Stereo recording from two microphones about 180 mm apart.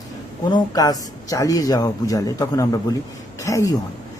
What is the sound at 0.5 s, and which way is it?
A man's voice, 20° left (ahead or behind).